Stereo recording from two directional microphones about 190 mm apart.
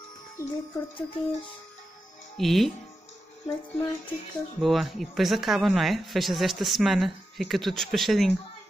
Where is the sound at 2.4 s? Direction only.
Centre (ahead or behind).